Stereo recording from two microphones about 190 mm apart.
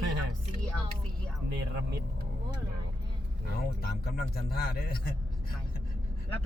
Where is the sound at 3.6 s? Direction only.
55° left (ahead or behind).